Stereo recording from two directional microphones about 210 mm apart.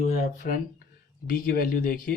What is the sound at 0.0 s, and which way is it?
Speech, 40° left (ahead or behind).